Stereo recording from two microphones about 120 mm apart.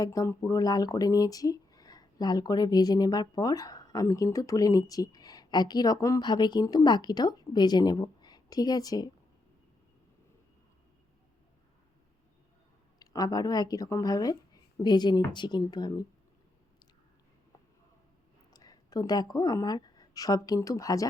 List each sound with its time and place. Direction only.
0.0 s speech: 30° left (ahead or behind)
13.0 s speech: 30° left (ahead or behind)
18.5 s a woman's voice: 30° left (ahead or behind)